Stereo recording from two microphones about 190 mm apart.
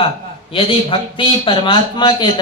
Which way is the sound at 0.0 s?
30° left (ahead or behind).